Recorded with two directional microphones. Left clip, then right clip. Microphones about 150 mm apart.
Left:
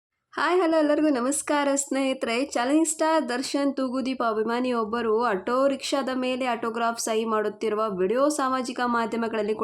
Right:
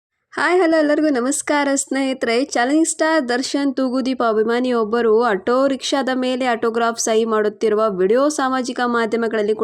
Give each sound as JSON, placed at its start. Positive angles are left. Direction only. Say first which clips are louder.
{"t": 0.3, "sound": "a woman's voice", "louder": "right 6 dB", "side_deg": -30}